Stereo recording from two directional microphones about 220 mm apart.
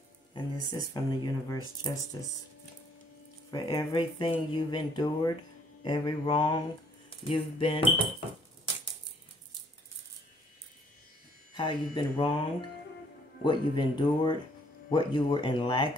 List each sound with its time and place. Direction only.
0.3 s speech: 15° left (ahead or behind)
3.4 s speech: 15° left (ahead or behind)
11.5 s speech: 20° left (ahead or behind)
13.4 s speech: 20° left (ahead or behind)